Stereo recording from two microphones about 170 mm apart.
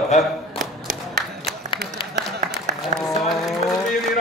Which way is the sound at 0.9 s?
65° right (ahead or behind).